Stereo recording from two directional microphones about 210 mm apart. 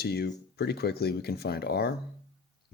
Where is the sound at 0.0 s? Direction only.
50° left (ahead or behind).